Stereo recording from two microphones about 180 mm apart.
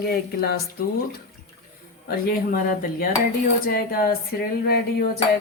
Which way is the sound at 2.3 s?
55° left (ahead or behind).